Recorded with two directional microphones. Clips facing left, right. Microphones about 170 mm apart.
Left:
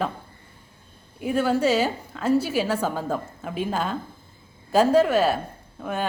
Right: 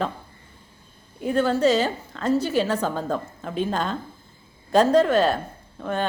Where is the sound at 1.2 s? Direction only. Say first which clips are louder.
Right 2 dB; 10° left (ahead or behind).